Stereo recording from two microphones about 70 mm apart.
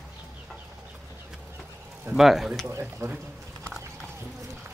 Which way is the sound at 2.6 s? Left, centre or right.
Right.